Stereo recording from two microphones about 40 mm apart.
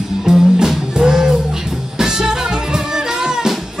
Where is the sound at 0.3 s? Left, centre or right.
Centre.